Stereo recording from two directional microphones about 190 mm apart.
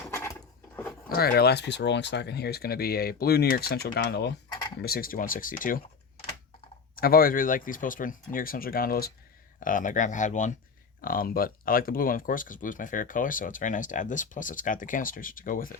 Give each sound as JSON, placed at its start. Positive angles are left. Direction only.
{"t": 0.1, "sound": "drawer open or close", "side_deg": 15}
{"t": 1.1, "sound": "speech", "side_deg": 55}
{"t": 6.9, "sound": "speech", "side_deg": 50}